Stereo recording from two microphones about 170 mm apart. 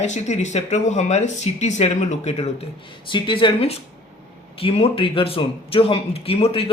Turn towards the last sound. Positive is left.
turn(degrees=35)  # may be behind; listen again after turning